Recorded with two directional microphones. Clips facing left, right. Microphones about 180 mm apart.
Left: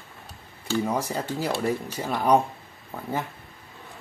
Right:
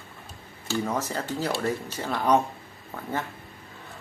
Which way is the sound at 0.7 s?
10° left (ahead or behind).